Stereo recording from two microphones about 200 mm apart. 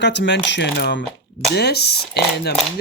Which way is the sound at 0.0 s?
60° left (ahead or behind).